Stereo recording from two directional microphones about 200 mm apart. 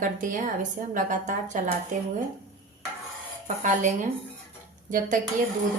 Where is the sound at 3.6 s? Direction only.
40° right (ahead or behind).